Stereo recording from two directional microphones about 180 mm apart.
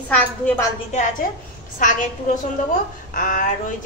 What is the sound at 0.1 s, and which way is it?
Speech, 10° left (ahead or behind).